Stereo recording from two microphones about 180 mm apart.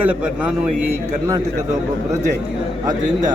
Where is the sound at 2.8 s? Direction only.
20° right (ahead or behind).